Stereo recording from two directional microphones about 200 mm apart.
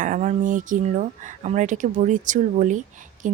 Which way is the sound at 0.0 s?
35° right (ahead or behind).